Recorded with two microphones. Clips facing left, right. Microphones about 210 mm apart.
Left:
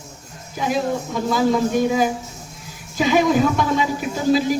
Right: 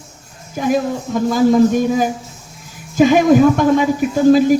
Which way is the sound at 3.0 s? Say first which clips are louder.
Right 7 dB; 50° right (ahead or behind).